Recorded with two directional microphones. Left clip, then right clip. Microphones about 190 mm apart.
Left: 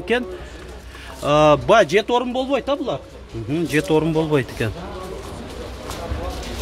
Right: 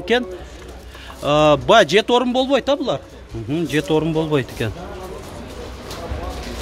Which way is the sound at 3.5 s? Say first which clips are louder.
Even; 5° right (ahead or behind).